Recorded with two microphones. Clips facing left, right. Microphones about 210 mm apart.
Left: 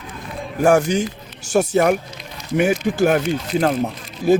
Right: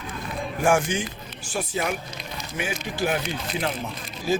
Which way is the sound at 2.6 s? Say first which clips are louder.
Left 12 dB; 55° left (ahead or behind).